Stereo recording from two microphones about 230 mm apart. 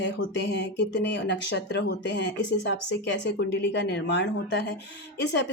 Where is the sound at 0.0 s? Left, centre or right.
Left.